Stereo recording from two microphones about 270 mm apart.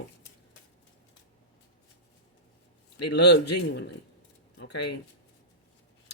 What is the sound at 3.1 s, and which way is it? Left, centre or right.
Speech, left.